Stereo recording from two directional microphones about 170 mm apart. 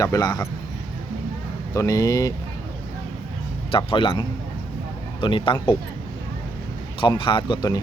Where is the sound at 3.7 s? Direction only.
30° left (ahead or behind).